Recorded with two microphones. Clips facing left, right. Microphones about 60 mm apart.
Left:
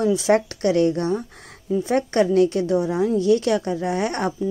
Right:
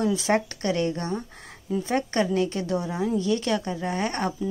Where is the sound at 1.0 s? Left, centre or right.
Left.